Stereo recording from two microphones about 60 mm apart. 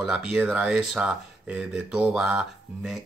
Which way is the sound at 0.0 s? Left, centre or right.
Centre.